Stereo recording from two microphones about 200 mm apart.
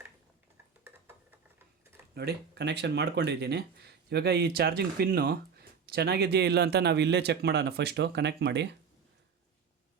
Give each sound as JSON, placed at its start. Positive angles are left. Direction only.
{"t": 2.1, "sound": "speech", "side_deg": -55}